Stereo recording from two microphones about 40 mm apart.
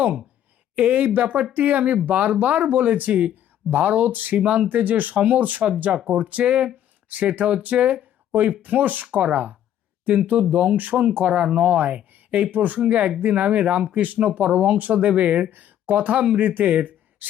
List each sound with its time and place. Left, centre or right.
0.8 s speech: right
4.4 s speech: right
4.7 s speech: right
10.3 s speech: right
10.8 s speech: right
11.3 s speech: right
15.4 s speech: right